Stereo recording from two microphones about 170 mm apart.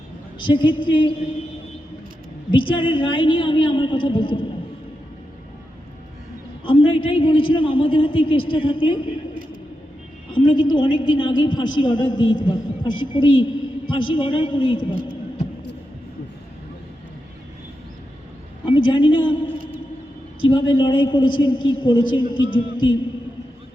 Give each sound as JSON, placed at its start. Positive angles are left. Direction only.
{"t": 0.3, "sound": "a woman's voice", "side_deg": 30}
{"t": 2.5, "sound": "a woman's voice", "side_deg": 30}
{"t": 6.7, "sound": "a man's voice", "side_deg": 30}
{"t": 10.3, "sound": "a woman's voice", "side_deg": 30}
{"t": 18.6, "sound": "a woman's voice", "side_deg": 30}
{"t": 20.4, "sound": "a woman's voice", "side_deg": 30}